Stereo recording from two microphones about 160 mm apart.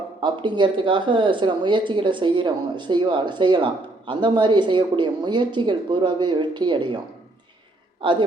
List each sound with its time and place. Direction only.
0.2 s speech: 30° right (ahead or behind)
8.0 s speech: 30° right (ahead or behind)